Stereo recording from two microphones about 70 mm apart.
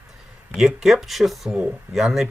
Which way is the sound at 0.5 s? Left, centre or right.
Centre.